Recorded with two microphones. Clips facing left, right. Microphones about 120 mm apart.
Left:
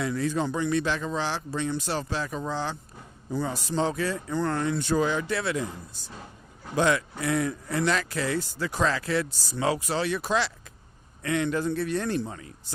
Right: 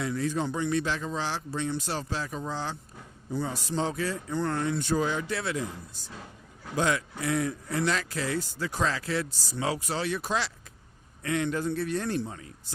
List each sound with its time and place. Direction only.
0.0 s speech: 85° left
3.4 s a man's voice: 90° left